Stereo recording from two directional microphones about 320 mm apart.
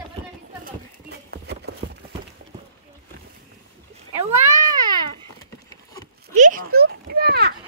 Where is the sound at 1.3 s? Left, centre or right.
Right.